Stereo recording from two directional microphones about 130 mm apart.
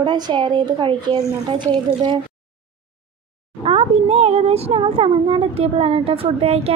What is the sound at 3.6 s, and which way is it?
Speech, 50° right (ahead or behind).